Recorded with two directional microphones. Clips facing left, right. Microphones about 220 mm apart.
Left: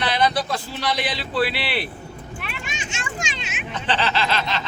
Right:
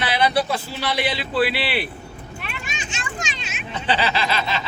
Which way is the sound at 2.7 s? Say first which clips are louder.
Left 1 dB; 25° left (ahead or behind).